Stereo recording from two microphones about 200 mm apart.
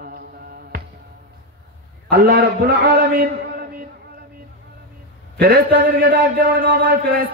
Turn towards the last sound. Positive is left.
turn(degrees=-50)  # may be behind; listen again after turning